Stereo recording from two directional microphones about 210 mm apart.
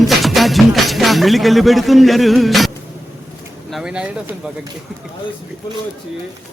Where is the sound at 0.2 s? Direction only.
Centre (ahead or behind).